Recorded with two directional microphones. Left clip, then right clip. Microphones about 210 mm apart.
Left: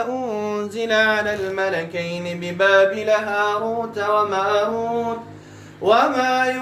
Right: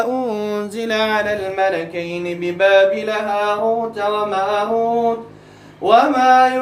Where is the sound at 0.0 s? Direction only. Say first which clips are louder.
Right 4 dB; 15° right (ahead or behind); by 1.8 s 10° left (ahead or behind).